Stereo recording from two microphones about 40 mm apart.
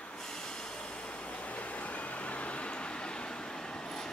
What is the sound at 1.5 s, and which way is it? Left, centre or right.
Vehicle, left.